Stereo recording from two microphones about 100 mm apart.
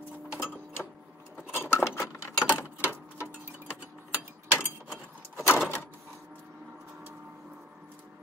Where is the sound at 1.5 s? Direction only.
25° left (ahead or behind).